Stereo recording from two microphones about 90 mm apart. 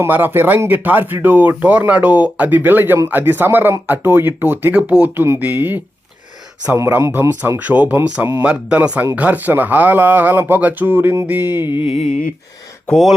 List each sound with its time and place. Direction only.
0.0 s speech: 25° right (ahead or behind)
6.7 s speech: 30° right (ahead or behind)
12.9 s speech: centre (ahead or behind)